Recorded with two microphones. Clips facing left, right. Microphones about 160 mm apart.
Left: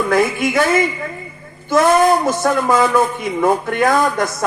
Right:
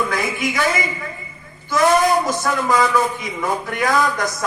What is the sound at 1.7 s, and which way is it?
A man's voice, 50° left (ahead or behind).